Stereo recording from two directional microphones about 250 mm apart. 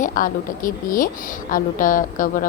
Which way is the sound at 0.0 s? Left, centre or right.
Left.